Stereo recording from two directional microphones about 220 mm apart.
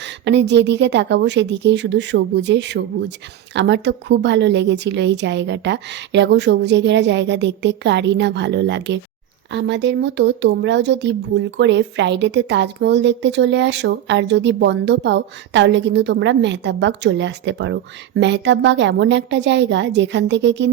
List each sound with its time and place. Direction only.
0.0 s speech: 50° right (ahead or behind)